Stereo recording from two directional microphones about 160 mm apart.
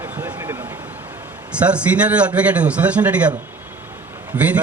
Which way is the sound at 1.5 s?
5° right (ahead or behind).